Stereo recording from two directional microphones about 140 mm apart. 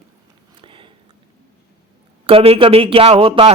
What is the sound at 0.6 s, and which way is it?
Biting, 40° right (ahead or behind).